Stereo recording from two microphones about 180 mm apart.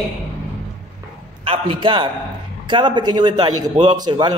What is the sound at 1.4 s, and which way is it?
A man's voice, 30° right (ahead or behind).